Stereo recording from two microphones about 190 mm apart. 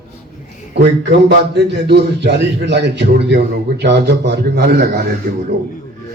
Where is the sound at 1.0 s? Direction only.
65° right (ahead or behind).